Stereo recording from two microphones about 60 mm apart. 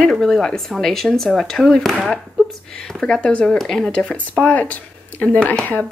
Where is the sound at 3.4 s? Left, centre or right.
Centre; by 5.8 s left.